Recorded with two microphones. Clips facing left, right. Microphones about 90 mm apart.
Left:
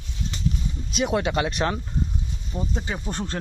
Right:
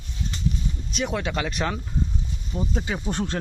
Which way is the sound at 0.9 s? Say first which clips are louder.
Left 4 dB; 15° left (ahead or behind).